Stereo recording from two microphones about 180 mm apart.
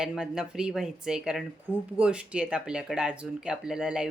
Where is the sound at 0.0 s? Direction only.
5° right (ahead or behind).